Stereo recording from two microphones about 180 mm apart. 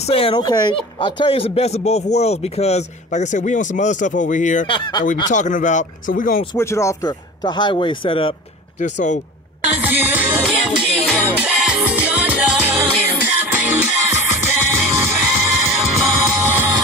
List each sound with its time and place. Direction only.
0.1 s speech: 30° left (ahead or behind)
4.6 s speech: 25° left (ahead or behind)
5.3 s speech: 45° left (ahead or behind)
6.5 s speech: 15° left (ahead or behind)
9.8 s music: 10° right (ahead or behind)
11.3 s music: 5° right (ahead or behind)